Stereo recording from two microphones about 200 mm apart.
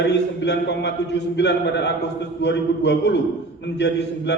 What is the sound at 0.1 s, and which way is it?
A man's voice, 60° left (ahead or behind).